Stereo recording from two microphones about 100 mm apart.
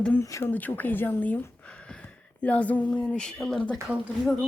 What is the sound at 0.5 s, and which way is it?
Speech, 15° left (ahead or behind).